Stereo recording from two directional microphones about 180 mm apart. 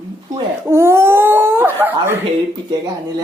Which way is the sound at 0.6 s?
15° right (ahead or behind).